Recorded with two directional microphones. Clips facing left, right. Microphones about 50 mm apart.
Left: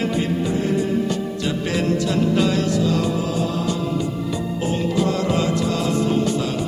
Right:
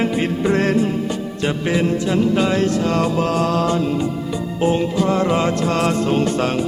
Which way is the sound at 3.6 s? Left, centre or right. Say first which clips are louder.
Right 4 dB; right.